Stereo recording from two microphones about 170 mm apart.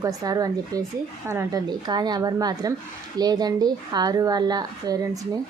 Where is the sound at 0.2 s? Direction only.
20° right (ahead or behind).